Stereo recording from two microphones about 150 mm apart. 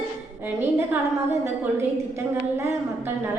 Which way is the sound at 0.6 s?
15° right (ahead or behind).